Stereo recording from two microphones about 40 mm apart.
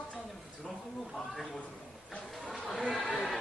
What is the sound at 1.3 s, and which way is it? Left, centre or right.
Speech, centre.